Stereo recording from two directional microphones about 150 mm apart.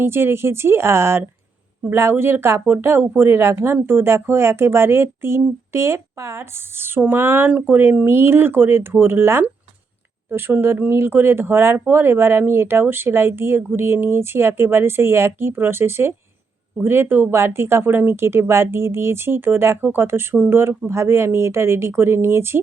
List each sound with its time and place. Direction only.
0.0 s speech: 15° right (ahead or behind)